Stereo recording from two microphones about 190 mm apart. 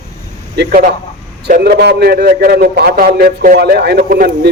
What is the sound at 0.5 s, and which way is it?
A man's voice, 55° right (ahead or behind).